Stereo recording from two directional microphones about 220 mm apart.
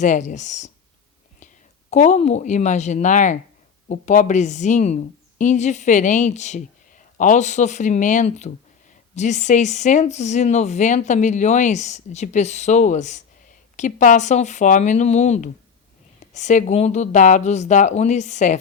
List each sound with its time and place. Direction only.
0.0 s speech: 35° left (ahead or behind)
1.9 s speech: 30° left (ahead or behind)